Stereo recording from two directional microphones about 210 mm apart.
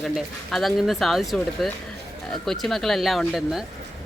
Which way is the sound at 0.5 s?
Centre (ahead or behind).